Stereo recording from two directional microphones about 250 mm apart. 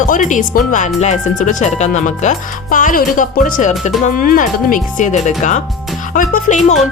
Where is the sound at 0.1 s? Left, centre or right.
Left.